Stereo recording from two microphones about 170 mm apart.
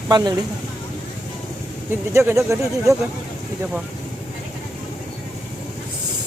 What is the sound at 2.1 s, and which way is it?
Speech, 15° right (ahead or behind).